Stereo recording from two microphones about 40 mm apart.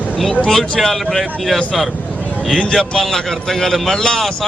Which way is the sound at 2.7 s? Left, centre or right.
Centre.